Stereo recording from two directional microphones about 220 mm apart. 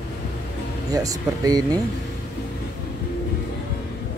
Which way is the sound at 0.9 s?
15° right (ahead or behind).